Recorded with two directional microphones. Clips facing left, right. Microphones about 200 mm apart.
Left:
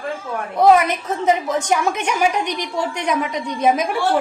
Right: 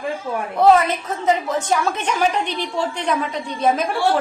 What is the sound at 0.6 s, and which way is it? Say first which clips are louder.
A woman's voice: left 1 dB; 15° left (ahead or behind).